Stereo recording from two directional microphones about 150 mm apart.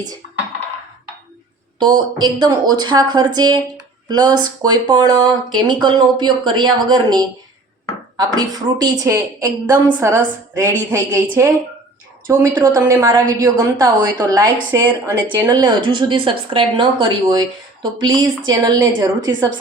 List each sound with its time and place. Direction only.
1.8 s a woman's voice: 30° right (ahead or behind)